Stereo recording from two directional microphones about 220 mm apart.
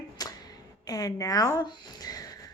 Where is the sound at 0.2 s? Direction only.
15° left (ahead or behind).